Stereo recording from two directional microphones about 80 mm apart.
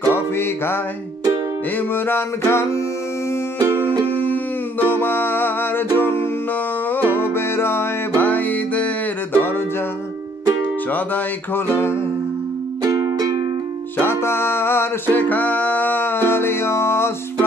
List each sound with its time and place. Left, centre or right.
0.0 s music: left
1.8 s music: left
4.1 s music: left
11.5 s music: left
12.8 s music: right
13.9 s music: left